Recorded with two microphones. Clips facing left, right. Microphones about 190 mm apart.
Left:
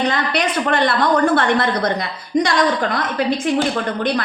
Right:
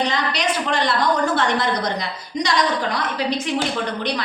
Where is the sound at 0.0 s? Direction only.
55° left (ahead or behind).